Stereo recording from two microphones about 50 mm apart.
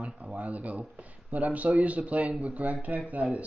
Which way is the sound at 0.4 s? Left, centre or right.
Right.